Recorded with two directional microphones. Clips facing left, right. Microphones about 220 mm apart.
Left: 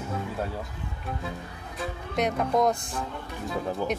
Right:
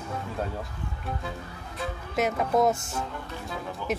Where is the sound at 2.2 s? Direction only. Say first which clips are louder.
Even; 5° right (ahead or behind).